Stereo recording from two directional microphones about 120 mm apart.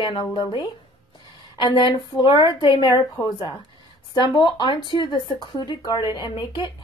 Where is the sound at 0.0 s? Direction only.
40° left (ahead or behind).